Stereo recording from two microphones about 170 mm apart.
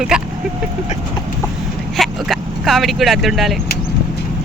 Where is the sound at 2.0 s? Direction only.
Centre (ahead or behind).